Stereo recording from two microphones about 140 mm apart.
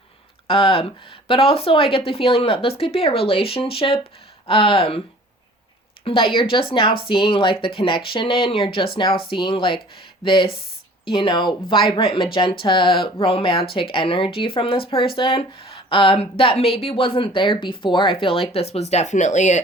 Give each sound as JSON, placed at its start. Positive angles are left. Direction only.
{"t": 0.4, "sound": "speech", "side_deg": 40}
{"t": 6.1, "sound": "speech", "side_deg": 40}